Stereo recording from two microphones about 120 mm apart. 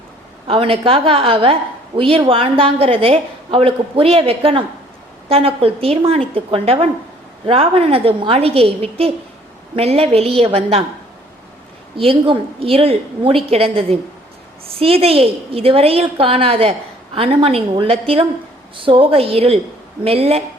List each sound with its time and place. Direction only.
0.4 s a woman's voice: 50° right (ahead or behind)
11.9 s a woman's voice: 45° right (ahead or behind)